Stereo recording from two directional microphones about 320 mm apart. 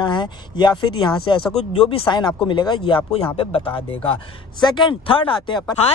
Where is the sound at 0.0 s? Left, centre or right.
Centre.